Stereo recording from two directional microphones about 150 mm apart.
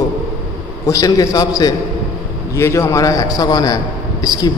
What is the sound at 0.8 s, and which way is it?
A man's voice, 20° left (ahead or behind).